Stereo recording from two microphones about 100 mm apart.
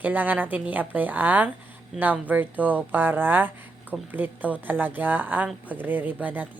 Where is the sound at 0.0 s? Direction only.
15° right (ahead or behind).